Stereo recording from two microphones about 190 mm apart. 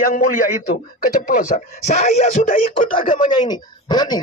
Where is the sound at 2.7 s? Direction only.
25° left (ahead or behind).